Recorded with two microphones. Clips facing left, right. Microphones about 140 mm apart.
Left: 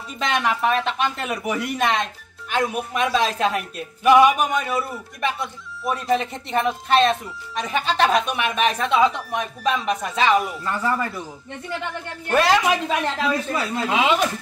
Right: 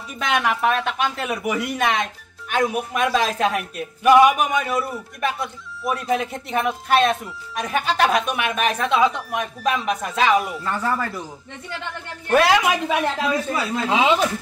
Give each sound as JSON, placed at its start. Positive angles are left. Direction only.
{"t": 0.2, "sound": "a man's voice", "side_deg": -5}
{"t": 12.3, "sound": "a man's voice", "side_deg": -5}
{"t": 13.8, "sound": "speech", "side_deg": -25}